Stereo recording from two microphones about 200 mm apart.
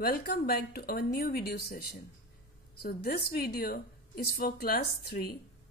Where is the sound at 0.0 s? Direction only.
50° left (ahead or behind).